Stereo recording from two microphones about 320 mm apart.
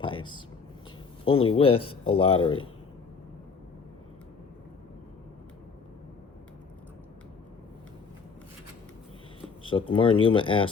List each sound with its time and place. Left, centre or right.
0.0 s speech: centre
9.9 s speech: centre